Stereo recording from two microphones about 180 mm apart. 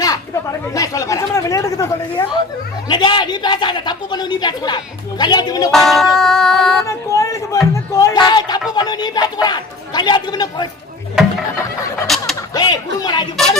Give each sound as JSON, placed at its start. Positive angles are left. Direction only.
{"t": 0.0, "sound": "a woman's voice", "side_deg": 20}
{"t": 5.7, "sound": "music", "side_deg": 0}
{"t": 6.8, "sound": "a sound", "side_deg": 15}
{"t": 7.7, "sound": "music", "side_deg": 20}
{"t": 8.7, "sound": "a woman's voice", "side_deg": 25}
{"t": 11.2, "sound": "a sound", "side_deg": -5}
{"t": 12.5, "sound": "a woman's voice", "side_deg": 20}